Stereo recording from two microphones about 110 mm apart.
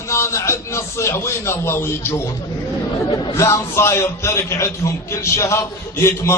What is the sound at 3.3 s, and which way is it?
A man's voice, 25° left (ahead or behind).